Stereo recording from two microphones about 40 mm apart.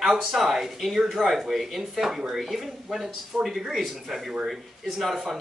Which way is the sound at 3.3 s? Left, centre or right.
Right.